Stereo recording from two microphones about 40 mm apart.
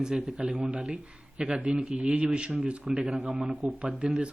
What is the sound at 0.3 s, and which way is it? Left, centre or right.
Speech, right.